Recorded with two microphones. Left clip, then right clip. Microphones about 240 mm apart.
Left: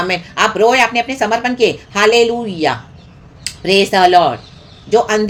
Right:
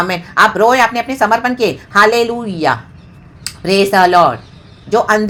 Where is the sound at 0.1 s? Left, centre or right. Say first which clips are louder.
Right 4 dB; centre.